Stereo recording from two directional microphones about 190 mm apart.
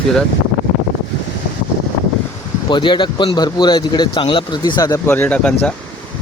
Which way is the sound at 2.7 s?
25° left (ahead or behind).